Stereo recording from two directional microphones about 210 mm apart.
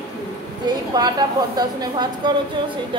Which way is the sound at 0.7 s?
20° right (ahead or behind).